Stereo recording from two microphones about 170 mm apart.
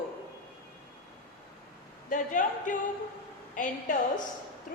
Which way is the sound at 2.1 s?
50° left (ahead or behind).